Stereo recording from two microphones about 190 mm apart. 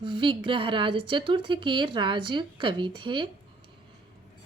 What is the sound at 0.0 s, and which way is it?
A woman's voice, 25° right (ahead or behind).